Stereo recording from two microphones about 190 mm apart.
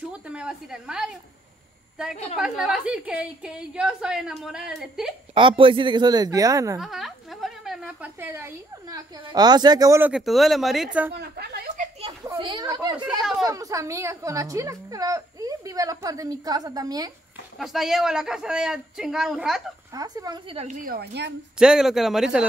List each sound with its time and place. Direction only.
0.1 s a woman's voice: 5° right (ahead or behind)
2.3 s a woman's voice: 5° right (ahead or behind)
5.3 s speech: 25° right (ahead or behind)
6.8 s a woman's voice: centre (ahead or behind)
11.1 s a woman's voice: 55° right (ahead or behind)
12.3 s speech: 25° right (ahead or behind)
13.2 s a sound: centre (ahead or behind)
13.5 s a woman's voice: 15° right (ahead or behind)
17.6 s a woman's voice: centre (ahead or behind)
19.9 s speech: 20° right (ahead or behind)
20.5 s a woman's voice: 40° right (ahead or behind); by 21.3 s 60° right (ahead or behind)
21.5 s a woman's voice: 5° right (ahead or behind)